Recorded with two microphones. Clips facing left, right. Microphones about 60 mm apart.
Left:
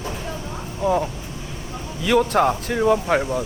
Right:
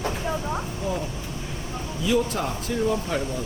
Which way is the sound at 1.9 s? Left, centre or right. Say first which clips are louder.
Left 6 dB; left.